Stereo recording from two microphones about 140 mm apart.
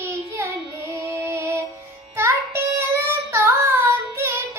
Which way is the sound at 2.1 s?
20° right (ahead or behind).